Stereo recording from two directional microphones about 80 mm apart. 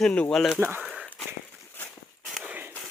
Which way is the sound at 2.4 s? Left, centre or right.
Centre.